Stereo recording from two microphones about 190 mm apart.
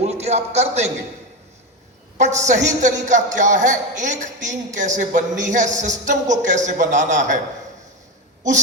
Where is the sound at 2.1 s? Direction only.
40° right (ahead or behind).